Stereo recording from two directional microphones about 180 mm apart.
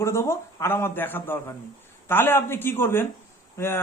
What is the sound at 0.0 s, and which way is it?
Speech, 15° left (ahead or behind).